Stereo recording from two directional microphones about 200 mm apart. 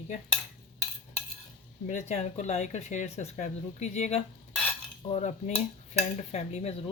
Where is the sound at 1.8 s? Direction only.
40° left (ahead or behind).